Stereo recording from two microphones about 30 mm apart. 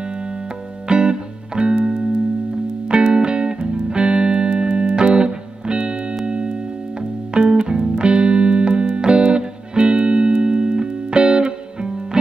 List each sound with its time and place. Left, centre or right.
0.8 s music: right